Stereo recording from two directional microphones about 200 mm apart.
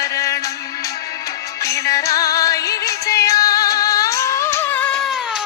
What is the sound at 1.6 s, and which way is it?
Music, 15° left (ahead or behind).